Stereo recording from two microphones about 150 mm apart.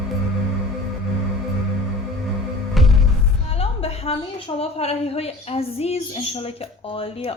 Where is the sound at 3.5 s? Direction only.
40° left (ahead or behind).